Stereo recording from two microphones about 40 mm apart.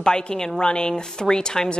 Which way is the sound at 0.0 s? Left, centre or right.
Centre.